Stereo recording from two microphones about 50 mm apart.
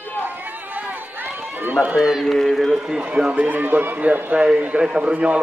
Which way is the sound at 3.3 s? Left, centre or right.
Right.